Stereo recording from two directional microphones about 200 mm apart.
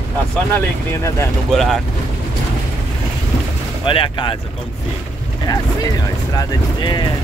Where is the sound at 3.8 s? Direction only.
25° left (ahead or behind).